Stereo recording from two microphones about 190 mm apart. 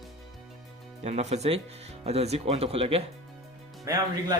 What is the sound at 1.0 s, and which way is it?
Speech, 35° right (ahead or behind).